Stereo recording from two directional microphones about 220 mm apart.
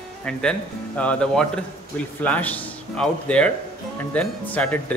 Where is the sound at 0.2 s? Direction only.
5° left (ahead or behind).